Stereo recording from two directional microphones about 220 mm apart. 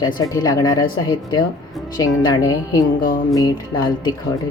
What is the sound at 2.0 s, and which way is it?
Speech, 15° left (ahead or behind).